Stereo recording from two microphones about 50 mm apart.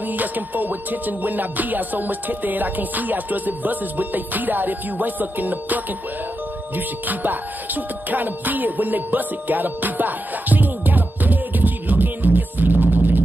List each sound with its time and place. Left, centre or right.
0.1 s music: right
7.1 s music: right